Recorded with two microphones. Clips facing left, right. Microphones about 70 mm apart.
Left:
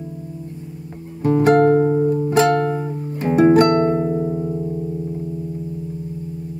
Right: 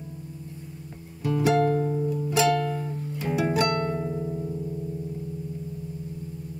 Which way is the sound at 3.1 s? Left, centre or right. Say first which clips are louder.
Left 13 dB; left.